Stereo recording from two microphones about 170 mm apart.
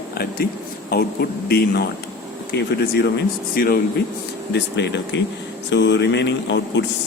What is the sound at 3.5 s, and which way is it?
Speech, 60° left (ahead or behind).